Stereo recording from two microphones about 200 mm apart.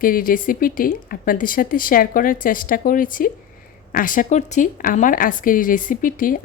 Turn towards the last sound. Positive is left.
turn(degrees=45)  # may be behind; listen again after turning